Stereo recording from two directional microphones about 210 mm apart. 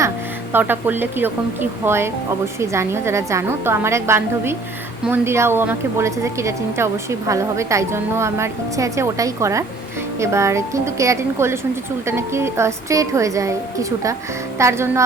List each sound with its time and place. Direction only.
0.5 s a woman's voice: 10° right (ahead or behind)